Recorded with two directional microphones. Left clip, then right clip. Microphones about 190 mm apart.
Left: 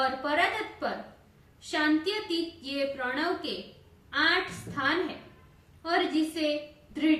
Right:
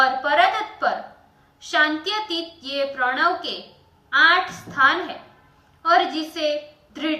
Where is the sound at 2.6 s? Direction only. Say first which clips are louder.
Right 8 dB; 25° left (ahead or behind).